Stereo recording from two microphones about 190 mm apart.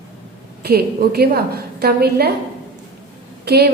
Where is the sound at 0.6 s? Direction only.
55° right (ahead or behind).